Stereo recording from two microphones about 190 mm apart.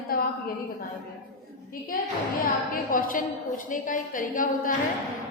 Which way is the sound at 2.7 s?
45° left (ahead or behind).